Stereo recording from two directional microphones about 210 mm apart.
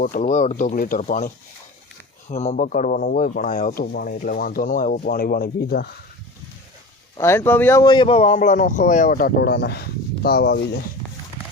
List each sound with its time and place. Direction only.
0.0 s speech: 40° left (ahead or behind)
2.3 s speech: 35° left (ahead or behind)
7.2 s speech: 10° left (ahead or behind); by 10.7 s 50° left (ahead or behind)